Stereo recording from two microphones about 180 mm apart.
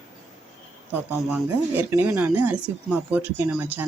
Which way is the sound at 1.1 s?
10° right (ahead or behind).